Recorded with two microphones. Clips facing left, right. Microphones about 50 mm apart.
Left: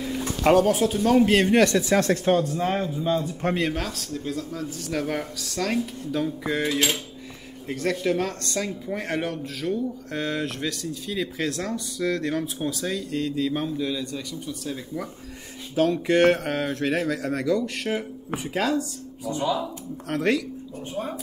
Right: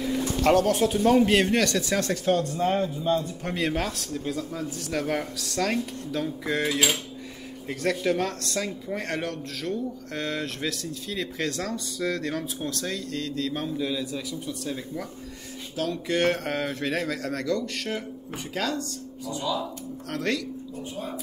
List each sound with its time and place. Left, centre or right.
0.4 s speech: centre
0.7 s speech: centre
1.5 s speech: left
2.8 s speech: centre
3.7 s speech: centre
13.7 s speech: centre
15.7 s speech: left
16.3 s speech: centre
19.3 s speech: left
20.1 s speech: centre